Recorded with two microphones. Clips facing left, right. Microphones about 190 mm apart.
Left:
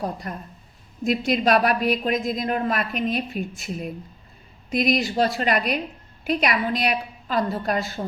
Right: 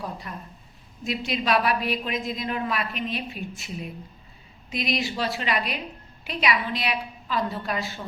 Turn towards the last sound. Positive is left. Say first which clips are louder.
# left 5 dB
turn(degrees=45)  # may be behind; listen again after turning